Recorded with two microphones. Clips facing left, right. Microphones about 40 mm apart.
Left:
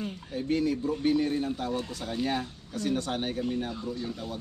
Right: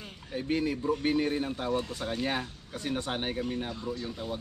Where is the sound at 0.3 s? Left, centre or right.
Centre.